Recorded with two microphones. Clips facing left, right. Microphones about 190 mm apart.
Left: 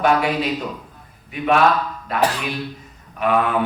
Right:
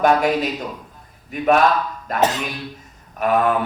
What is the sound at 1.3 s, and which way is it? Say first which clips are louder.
A man's voice: right 1 dB; 45° right (ahead or behind).